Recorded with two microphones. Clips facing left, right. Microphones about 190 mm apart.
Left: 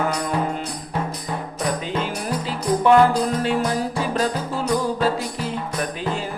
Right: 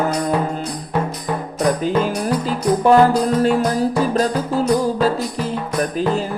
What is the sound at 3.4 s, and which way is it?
Music, 40° right (ahead or behind).